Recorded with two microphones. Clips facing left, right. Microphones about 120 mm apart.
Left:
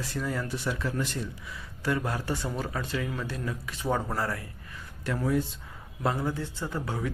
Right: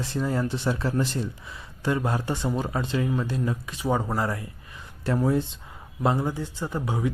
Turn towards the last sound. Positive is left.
turn(degrees=-15)  # may be behind; listen again after turning